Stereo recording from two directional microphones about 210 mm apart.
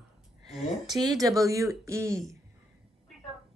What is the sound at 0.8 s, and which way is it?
A woman's voice, 20° right (ahead or behind).